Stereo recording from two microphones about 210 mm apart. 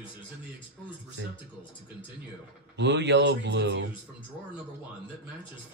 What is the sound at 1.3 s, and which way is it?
Speech, 25° left (ahead or behind).